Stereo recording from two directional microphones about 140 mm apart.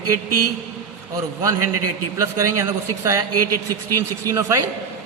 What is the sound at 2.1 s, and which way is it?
Speech, 20° right (ahead or behind).